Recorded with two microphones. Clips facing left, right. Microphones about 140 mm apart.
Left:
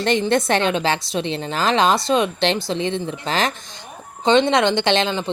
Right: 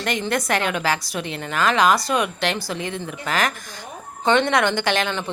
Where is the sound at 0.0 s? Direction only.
30° left (ahead or behind).